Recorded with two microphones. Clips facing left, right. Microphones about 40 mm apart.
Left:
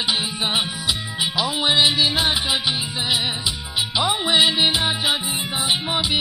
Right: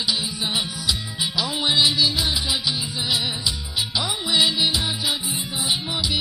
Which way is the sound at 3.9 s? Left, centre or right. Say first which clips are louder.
Left 4 dB; left.